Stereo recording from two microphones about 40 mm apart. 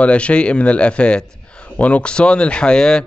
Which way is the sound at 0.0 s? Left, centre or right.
Left.